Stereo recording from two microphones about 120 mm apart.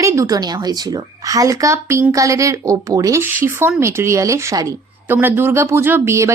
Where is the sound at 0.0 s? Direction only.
25° right (ahead or behind).